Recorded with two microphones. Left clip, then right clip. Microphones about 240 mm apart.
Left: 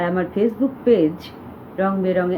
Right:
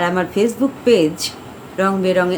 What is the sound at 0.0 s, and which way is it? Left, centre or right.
A woman's voice, centre.